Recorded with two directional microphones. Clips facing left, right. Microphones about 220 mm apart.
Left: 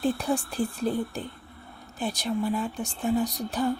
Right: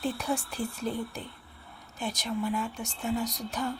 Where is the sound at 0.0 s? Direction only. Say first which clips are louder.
Left 5 dB; 30° left (ahead or behind).